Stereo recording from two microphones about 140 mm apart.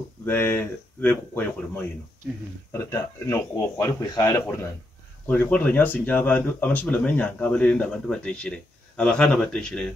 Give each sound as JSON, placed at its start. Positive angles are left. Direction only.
{"t": 0.2, "sound": "speech", "side_deg": 15}
{"t": 2.7, "sound": "a man's voice", "side_deg": 20}